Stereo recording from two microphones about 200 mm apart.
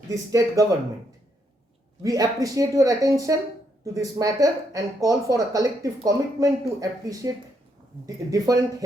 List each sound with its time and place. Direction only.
0.1 s speech: 15° right (ahead or behind)
2.0 s speech: 15° right (ahead or behind)